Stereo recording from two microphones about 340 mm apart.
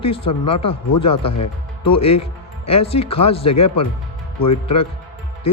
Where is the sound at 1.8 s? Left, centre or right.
Centre.